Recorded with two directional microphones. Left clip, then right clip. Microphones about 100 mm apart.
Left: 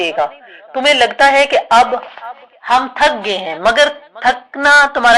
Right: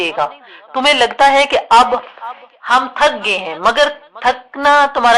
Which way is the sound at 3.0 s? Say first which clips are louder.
Even; 10° left (ahead or behind).